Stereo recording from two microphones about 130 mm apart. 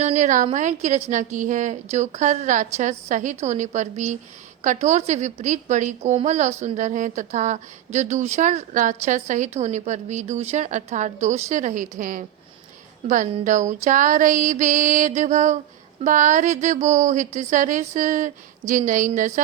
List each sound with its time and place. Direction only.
0.0 s a sound: 70° right (ahead or behind)
0.5 s a woman's voice: 70° right (ahead or behind); by 12.2 s 90° right
13.4 s speech: 75° right (ahead or behind)